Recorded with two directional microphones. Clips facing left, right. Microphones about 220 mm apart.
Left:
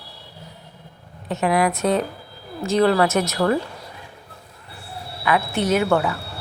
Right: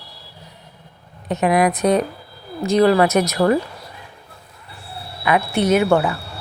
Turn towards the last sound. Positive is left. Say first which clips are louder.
# right 3 dB
turn(degrees=-15)  # may be behind; listen again after turning